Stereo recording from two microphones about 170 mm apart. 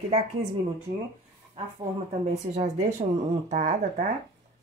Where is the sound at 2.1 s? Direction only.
40° right (ahead or behind).